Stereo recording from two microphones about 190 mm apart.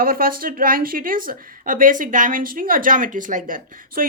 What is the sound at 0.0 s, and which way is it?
Speech, 50° right (ahead or behind).